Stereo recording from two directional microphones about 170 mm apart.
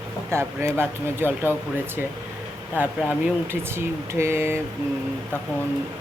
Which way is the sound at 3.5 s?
15° right (ahead or behind).